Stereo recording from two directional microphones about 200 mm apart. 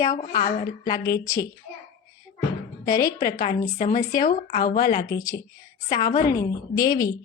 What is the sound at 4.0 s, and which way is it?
Speech, 15° left (ahead or behind).